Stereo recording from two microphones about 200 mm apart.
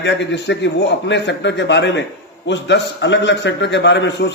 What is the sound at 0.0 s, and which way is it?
A man's voice, 60° left (ahead or behind).